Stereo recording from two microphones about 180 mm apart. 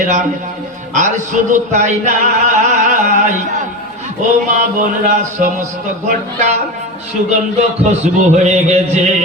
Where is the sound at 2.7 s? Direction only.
45° right (ahead or behind).